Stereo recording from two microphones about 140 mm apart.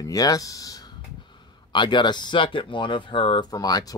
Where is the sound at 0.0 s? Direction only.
25° left (ahead or behind).